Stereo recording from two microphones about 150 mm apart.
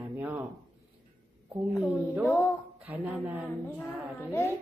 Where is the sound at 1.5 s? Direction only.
10° right (ahead or behind).